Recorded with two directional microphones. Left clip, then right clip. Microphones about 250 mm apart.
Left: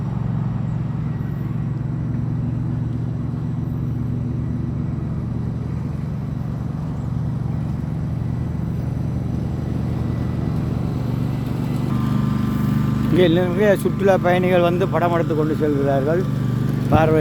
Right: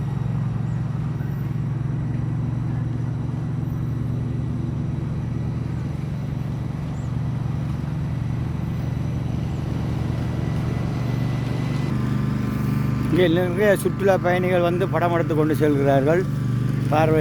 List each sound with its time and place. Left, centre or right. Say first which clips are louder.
11.9 s vehicle: left 4 dB; left
13.1 s speech: left 2 dB; centre
16.9 s speech: left 2 dB; centre